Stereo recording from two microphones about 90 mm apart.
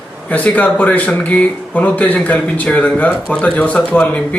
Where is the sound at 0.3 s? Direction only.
15° left (ahead or behind).